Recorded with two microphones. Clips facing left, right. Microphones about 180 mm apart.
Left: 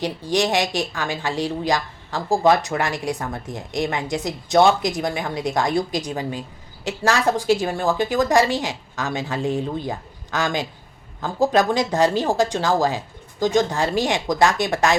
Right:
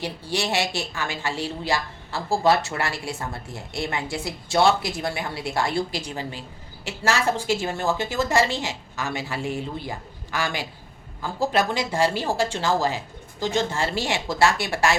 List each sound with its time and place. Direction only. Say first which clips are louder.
0.0 s a woman's voice: left 6 dB; 15° left (ahead or behind)